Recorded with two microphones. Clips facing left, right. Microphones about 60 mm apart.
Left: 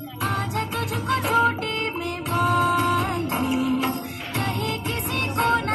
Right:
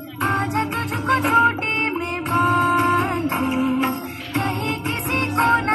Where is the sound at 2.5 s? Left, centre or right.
Right.